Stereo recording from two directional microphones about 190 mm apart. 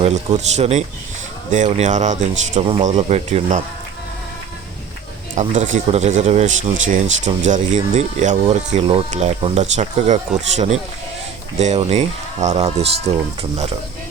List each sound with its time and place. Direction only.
0.0 s speech: 35° right (ahead or behind)
2.6 s speech: 25° right (ahead or behind)
5.3 s speech: 40° right (ahead or behind)